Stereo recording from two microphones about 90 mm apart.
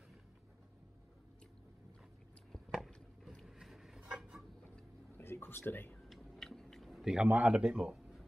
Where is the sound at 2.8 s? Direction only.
5° left (ahead or behind).